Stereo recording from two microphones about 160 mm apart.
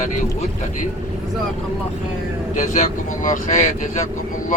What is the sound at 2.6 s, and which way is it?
Speech, 50° left (ahead or behind).